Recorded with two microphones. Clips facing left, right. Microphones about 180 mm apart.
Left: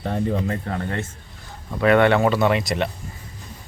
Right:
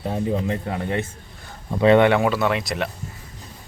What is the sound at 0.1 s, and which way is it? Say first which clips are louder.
Speech: even; 15° right (ahead or behind).